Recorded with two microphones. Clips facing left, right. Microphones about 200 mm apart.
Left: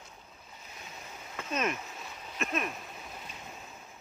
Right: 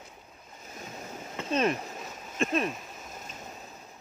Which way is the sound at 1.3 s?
30° right (ahead or behind).